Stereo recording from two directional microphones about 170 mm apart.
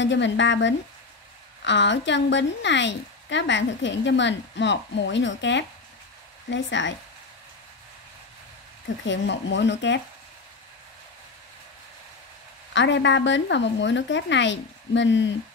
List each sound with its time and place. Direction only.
0.0 s a woman's voice: 90° left
9.0 s a woman's voice: 90° left
12.7 s a woman's voice: 90° left